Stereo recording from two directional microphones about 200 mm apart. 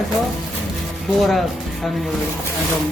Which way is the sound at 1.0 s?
Centre (ahead or behind).